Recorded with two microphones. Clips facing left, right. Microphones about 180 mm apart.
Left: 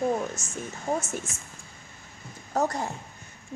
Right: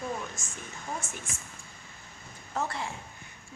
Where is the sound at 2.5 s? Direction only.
40° left (ahead or behind).